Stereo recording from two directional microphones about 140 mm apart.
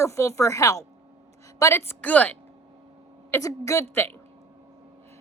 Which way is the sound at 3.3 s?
20° left (ahead or behind).